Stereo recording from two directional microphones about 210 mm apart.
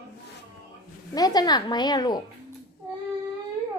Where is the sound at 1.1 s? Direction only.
20° left (ahead or behind).